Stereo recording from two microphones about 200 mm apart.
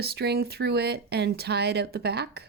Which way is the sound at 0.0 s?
55° right (ahead or behind).